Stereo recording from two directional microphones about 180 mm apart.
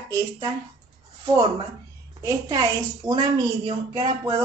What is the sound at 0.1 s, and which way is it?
Speech, 20° right (ahead or behind).